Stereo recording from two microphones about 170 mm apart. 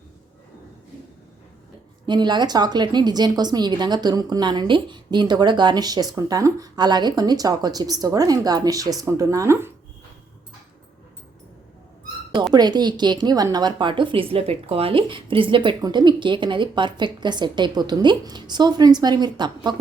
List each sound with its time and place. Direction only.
2.0 s a woman's voice: 25° right (ahead or behind)
12.5 s a woman's voice: 25° right (ahead or behind)